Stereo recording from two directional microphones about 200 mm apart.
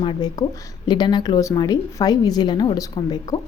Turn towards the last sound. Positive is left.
turn(degrees=20)  # may be behind; listen again after turning